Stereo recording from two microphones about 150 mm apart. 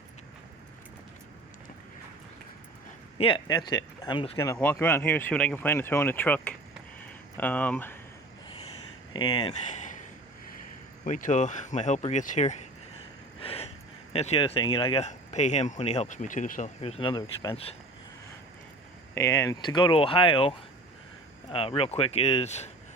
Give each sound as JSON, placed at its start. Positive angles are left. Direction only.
{"t": 3.2, "sound": "speech", "side_deg": 35}
{"t": 4.5, "sound": "speech", "side_deg": 10}
{"t": 9.1, "sound": "speech", "side_deg": 35}
{"t": 9.6, "sound": "a sound", "side_deg": 55}
{"t": 11.0, "sound": "speech", "side_deg": 60}
{"t": 13.4, "sound": "gasp", "side_deg": 40}
{"t": 14.1, "sound": "speech", "side_deg": 45}
{"t": 19.1, "sound": "speech", "side_deg": 20}